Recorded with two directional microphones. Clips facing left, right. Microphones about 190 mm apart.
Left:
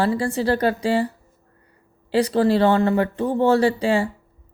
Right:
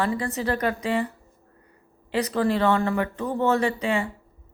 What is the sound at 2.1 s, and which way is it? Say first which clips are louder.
Speech: left 5 dB; 30° left (ahead or behind).